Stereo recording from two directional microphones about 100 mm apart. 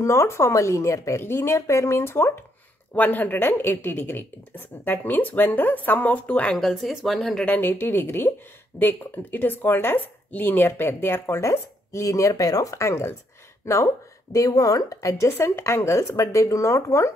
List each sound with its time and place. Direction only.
0.0 s a woman's voice: 30° left (ahead or behind); by 7.4 s centre (ahead or behind)
7.4 s a woman's voice: 20° left (ahead or behind)